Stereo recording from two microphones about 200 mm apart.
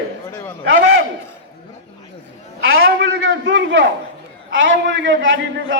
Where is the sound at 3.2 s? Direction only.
70° right (ahead or behind).